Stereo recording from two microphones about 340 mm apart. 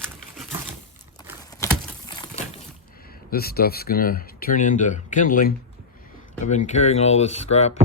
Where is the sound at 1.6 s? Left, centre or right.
Centre.